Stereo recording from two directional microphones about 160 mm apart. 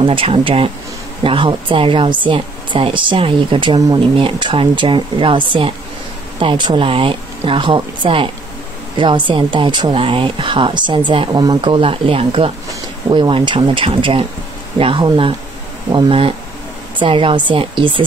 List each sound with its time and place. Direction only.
0.0 s speech: 35° right (ahead or behind)